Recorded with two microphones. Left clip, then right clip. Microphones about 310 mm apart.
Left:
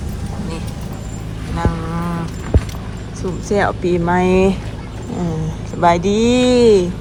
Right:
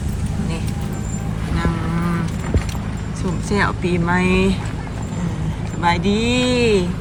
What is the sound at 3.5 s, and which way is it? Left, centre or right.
Speech, centre.